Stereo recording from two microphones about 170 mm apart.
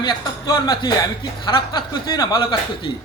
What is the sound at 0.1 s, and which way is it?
Speech, 25° left (ahead or behind).